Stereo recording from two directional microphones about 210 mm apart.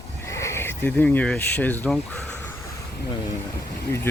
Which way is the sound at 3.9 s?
10° left (ahead or behind).